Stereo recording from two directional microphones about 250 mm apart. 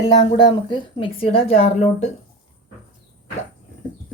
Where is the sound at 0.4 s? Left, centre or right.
Centre.